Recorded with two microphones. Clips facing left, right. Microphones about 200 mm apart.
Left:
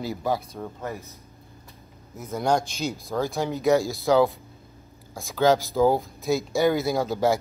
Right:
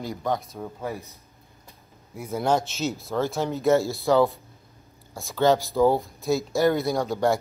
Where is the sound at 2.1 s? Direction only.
5° right (ahead or behind).